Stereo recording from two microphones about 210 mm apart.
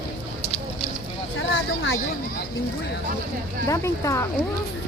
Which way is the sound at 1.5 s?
65° left (ahead or behind).